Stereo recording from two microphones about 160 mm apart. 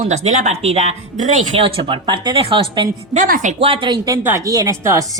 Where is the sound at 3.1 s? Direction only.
50° right (ahead or behind).